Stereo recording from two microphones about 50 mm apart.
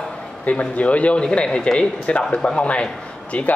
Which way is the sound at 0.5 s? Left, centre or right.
Left.